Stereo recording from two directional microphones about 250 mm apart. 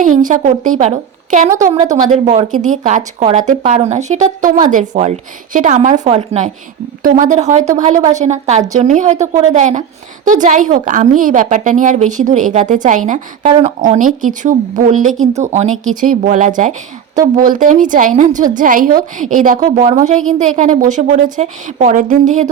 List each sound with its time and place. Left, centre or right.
0.0 s a woman's voice: right